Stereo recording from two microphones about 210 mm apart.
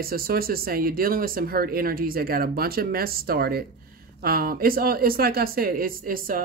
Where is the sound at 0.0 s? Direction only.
45° right (ahead or behind).